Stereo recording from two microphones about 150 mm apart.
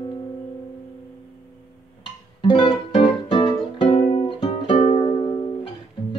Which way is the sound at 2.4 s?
35° left (ahead or behind).